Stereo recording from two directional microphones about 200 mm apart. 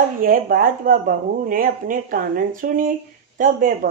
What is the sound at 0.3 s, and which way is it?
A woman's voice, 45° right (ahead or behind).